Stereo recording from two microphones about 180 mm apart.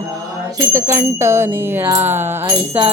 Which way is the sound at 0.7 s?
15° right (ahead or behind).